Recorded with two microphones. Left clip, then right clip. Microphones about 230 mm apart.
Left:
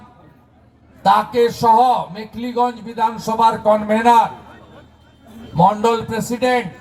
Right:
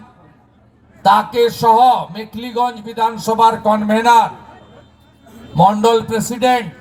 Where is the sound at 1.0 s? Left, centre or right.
Right.